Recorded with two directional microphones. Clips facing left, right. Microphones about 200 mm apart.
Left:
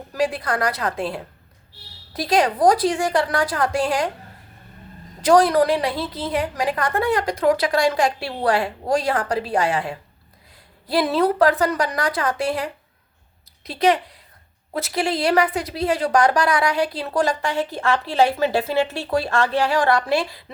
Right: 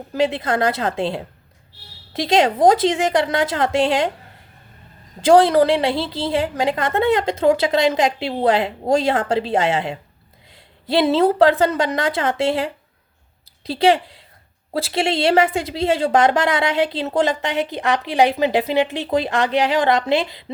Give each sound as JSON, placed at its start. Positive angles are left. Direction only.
{"t": 0.1, "sound": "a woman's voice", "side_deg": -25}
{"t": 5.2, "sound": "a woman's voice", "side_deg": -25}